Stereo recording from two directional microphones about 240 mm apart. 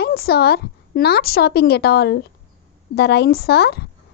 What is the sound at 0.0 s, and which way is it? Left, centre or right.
A woman's voice, left.